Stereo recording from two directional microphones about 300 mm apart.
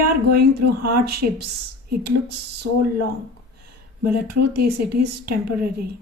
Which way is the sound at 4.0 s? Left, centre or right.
Right.